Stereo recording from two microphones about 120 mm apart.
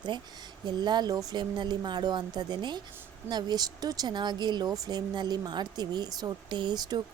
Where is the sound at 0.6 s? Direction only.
35° right (ahead or behind).